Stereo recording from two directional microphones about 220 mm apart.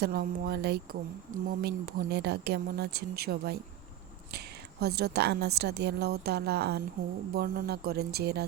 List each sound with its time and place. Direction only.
0.0 s a woman's voice: 45° right (ahead or behind)